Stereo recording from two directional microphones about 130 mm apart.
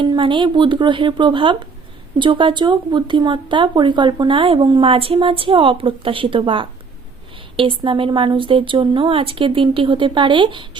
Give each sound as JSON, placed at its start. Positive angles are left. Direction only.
{"t": 0.0, "sound": "speech", "side_deg": -40}